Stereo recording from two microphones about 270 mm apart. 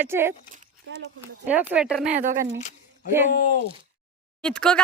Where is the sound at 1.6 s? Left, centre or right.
Centre.